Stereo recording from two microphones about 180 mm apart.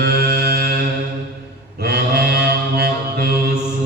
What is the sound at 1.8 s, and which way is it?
Mantra, 60° right (ahead or behind).